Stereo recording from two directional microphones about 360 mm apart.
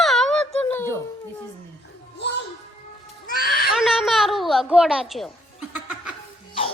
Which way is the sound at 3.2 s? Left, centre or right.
Left.